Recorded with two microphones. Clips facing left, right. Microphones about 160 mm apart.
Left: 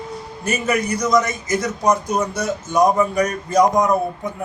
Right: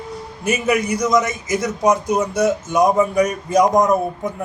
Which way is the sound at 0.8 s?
20° right (ahead or behind).